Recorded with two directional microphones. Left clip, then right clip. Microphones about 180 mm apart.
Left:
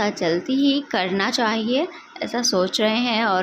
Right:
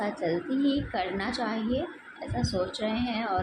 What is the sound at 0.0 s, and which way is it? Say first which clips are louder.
A woman's voice: left 8 dB; 35° left (ahead or behind).